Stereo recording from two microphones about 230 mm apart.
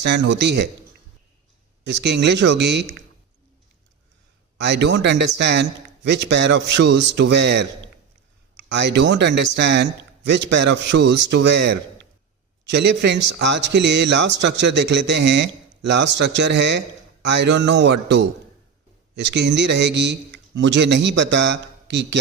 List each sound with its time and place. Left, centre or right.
0.0 s a man's voice: right
1.8 s a man's voice: right
4.6 s a man's voice: right